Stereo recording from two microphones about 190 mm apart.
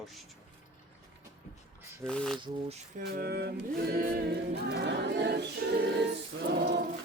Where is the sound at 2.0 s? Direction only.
5° left (ahead or behind).